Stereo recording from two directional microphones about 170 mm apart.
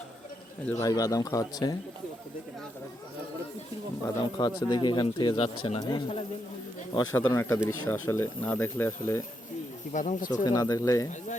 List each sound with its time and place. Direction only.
0.7 s speech: 20° left (ahead or behind)
4.0 s speech: 25° left (ahead or behind)
9.9 s speech: 45° left (ahead or behind)
10.4 s speech: 20° left (ahead or behind)